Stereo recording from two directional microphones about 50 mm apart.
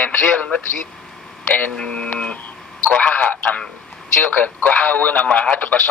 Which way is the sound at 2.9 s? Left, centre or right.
Left.